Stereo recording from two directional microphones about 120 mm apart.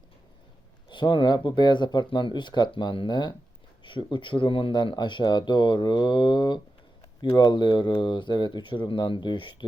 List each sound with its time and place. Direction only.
0.9 s speech: 40° left (ahead or behind)